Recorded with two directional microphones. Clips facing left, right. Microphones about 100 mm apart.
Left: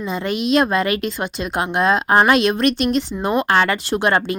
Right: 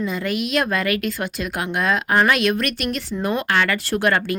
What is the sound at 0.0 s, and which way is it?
Speech, 25° left (ahead or behind).